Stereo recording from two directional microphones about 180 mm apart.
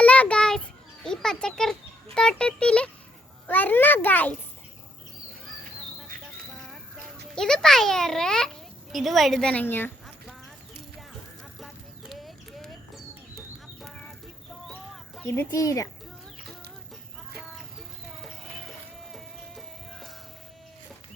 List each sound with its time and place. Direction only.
0.0 s a sound: 5° left (ahead or behind)
2.1 s a child's voice: 5° left (ahead or behind)
7.3 s a child's voice: 5° left (ahead or behind)
11.6 s clip-clop: centre (ahead or behind)
14.7 s a sound: 10° left (ahead or behind)
19.1 s music: centre (ahead or behind)